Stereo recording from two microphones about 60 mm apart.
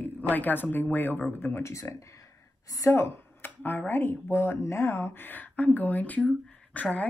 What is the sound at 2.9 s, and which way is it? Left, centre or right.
A woman's voice, left.